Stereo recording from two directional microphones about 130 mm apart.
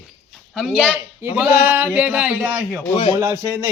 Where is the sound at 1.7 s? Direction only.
15° right (ahead or behind).